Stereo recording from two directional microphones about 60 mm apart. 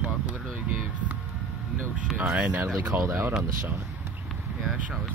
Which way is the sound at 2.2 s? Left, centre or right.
Right.